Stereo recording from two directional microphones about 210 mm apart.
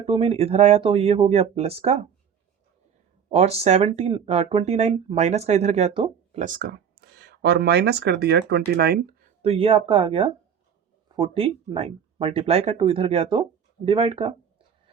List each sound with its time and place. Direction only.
0.0 s speech: 25° right (ahead or behind)
3.2 s speech: 30° right (ahead or behind)
6.4 s speech: 40° right (ahead or behind)
9.4 s speech: 25° right (ahead or behind)